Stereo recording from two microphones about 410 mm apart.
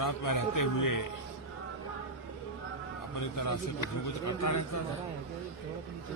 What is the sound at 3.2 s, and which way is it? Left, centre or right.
A man's voice, left.